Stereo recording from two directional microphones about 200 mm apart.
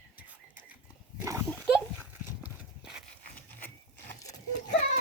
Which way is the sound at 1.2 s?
15° right (ahead or behind).